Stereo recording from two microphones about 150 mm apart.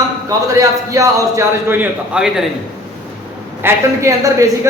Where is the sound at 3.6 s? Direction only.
15° right (ahead or behind).